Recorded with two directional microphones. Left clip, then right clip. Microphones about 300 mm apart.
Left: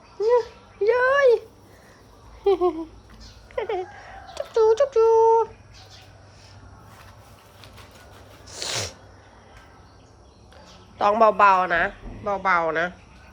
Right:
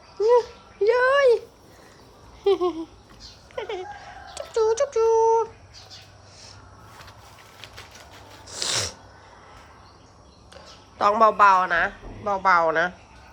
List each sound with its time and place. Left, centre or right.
0.3 s a sound: centre
8.4 s sneeze: centre
10.5 s a man's voice: centre